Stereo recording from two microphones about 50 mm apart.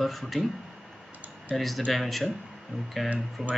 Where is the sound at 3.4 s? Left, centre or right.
Centre.